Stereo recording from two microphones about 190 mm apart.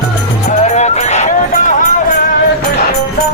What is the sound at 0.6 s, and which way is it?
Music, 35° left (ahead or behind).